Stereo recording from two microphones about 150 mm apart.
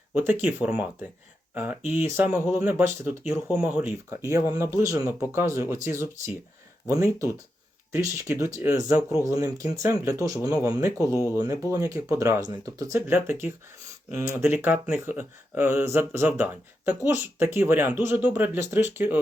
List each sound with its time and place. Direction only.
0.1 s speech: 10° right (ahead or behind)